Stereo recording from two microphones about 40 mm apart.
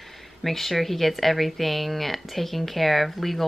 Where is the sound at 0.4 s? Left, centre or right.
Centre.